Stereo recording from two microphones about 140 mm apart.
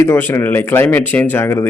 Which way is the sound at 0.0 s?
15° left (ahead or behind).